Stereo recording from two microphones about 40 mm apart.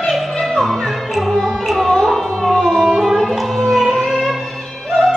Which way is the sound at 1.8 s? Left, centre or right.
Centre.